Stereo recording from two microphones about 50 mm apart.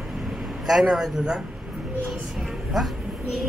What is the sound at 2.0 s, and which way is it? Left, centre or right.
Speech, centre.